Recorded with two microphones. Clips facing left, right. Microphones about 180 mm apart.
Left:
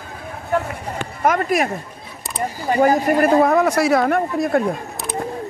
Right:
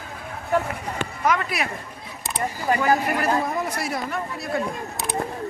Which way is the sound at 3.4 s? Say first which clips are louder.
Left 11 dB; 75° left (ahead or behind).